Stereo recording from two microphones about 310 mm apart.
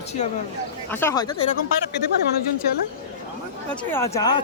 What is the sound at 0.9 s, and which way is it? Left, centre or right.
Speech, centre.